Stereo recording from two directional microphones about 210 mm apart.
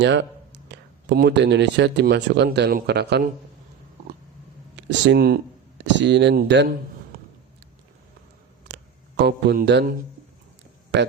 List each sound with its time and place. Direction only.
0.0 s speech: 55° right (ahead or behind)
4.8 s speech: 55° right (ahead or behind)
8.6 s a sound: 55° right (ahead or behind)
10.9 s speech: 55° right (ahead or behind)